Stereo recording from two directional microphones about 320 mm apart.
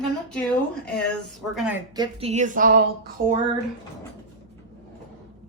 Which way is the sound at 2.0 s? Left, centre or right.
Centre.